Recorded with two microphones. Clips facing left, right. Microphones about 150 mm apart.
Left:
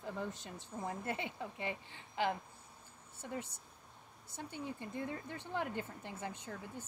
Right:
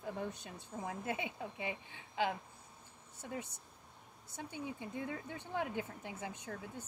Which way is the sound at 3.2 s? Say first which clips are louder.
Left 1 dB; 15° right (ahead or behind).